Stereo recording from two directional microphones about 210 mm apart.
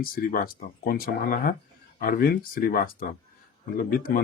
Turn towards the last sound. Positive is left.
turn(degrees=45)  # may be behind; listen again after turning